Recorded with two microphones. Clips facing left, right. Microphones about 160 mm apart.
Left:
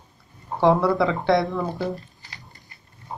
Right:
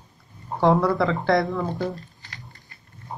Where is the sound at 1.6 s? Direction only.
20° left (ahead or behind).